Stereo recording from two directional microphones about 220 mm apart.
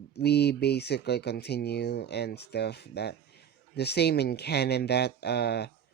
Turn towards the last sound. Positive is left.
turn(degrees=50)  # may be behind; listen again after turning